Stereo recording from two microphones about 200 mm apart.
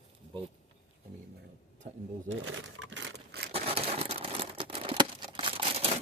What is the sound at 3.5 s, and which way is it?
Crumpling, 30° right (ahead or behind).